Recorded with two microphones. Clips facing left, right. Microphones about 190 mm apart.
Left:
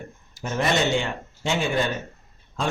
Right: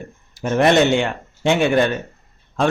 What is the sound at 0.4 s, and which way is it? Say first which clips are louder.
A man's voice: right 8 dB; 65° right (ahead or behind).